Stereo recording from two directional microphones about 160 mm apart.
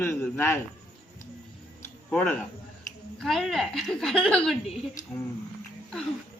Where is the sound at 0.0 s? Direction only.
15° left (ahead or behind).